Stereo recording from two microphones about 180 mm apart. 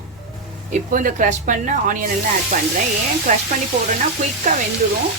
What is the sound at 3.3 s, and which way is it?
Speech, 45° right (ahead or behind).